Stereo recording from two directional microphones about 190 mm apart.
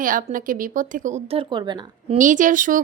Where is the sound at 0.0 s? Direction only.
45° right (ahead or behind).